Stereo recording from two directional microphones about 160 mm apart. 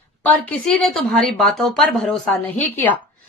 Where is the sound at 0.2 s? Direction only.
5° left (ahead or behind).